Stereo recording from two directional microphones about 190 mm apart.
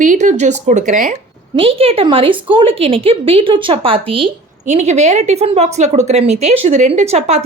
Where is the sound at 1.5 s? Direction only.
30° right (ahead or behind).